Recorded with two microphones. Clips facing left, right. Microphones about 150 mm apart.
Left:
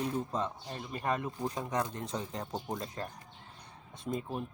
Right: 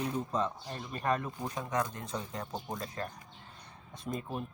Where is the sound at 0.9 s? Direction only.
20° left (ahead or behind).